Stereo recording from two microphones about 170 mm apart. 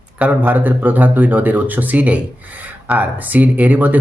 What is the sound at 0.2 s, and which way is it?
Speech, 10° right (ahead or behind).